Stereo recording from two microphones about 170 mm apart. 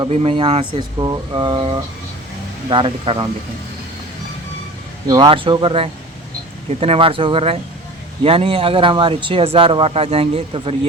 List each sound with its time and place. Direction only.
0.0 s speech: 35° right (ahead or behind)
5.0 s speech: 25° right (ahead or behind)